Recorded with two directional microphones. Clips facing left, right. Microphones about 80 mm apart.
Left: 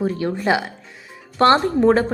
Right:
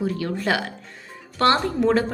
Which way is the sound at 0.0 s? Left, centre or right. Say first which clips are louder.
Left 3 dB; left.